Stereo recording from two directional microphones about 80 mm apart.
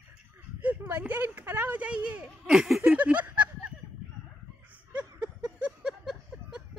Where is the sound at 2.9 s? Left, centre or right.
Centre.